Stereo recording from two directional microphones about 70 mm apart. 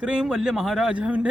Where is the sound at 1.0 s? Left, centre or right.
Centre.